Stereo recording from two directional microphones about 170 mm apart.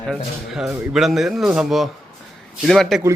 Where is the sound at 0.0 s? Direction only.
Centre (ahead or behind).